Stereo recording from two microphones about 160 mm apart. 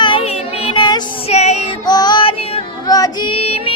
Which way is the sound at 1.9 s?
25° left (ahead or behind).